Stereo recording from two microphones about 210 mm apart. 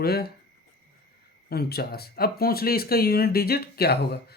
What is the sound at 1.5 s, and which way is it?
Speech, 50° left (ahead or behind).